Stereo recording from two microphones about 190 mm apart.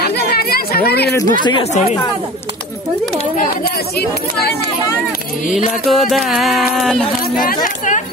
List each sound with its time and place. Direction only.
0.0 s speech: 55° left (ahead or behind)
1.1 s speech: 25° left (ahead or behind)
3.6 s speech: 55° left (ahead or behind)
5.7 s speech: centre (ahead or behind)
7.6 s speech: 40° left (ahead or behind)